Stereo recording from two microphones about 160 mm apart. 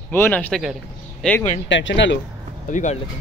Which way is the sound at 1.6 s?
90° left.